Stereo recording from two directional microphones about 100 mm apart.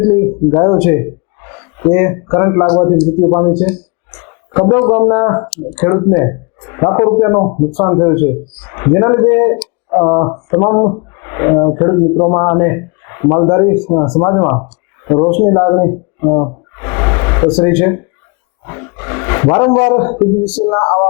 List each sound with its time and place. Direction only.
0.0 s a man's voice: 25° left (ahead or behind)
5.5 s speech: 10° left (ahead or behind)
5.9 s speech: 25° left (ahead or behind)
14.2 s a sound: 25° left (ahead or behind)
17.5 s speech: 15° left (ahead or behind)
18.6 s roar: 25° left (ahead or behind)
20.4 s speech: 10° left (ahead or behind)
20.7 s speech: 25° left (ahead or behind)